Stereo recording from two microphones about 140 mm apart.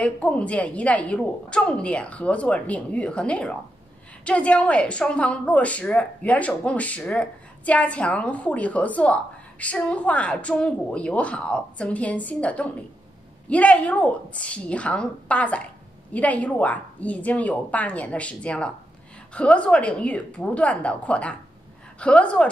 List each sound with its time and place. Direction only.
0.0 s a woman's voice: 10° left (ahead or behind)